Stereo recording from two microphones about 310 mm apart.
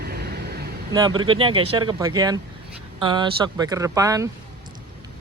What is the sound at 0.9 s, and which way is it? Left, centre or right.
Speech, centre.